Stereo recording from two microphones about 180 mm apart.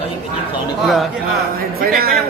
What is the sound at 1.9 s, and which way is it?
Speech, 55° right (ahead or behind).